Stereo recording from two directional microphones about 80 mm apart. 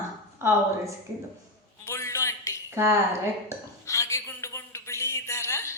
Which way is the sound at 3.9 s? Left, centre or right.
Left.